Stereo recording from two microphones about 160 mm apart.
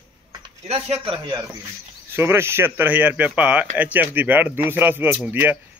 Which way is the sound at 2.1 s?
15° right (ahead or behind).